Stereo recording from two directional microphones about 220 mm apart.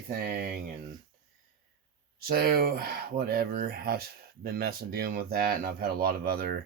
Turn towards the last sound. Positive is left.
turn(degrees=-45)  # may be behind; listen again after turning